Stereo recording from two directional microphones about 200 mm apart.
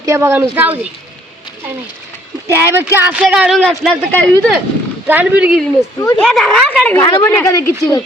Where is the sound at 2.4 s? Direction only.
10° right (ahead or behind); by 4.6 s 5° left (ahead or behind).